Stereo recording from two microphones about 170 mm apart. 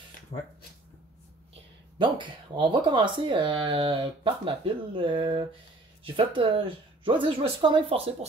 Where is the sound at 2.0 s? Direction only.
30° right (ahead or behind).